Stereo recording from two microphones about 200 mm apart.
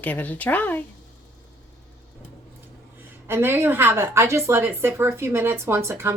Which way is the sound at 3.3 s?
10° right (ahead or behind).